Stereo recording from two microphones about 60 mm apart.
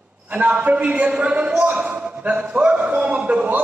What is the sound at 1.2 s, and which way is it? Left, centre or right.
A man's voice, centre.